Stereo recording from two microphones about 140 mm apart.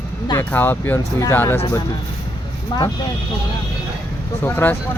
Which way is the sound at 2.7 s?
30° left (ahead or behind).